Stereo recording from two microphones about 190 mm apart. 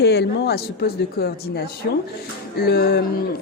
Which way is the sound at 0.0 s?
60° left (ahead or behind).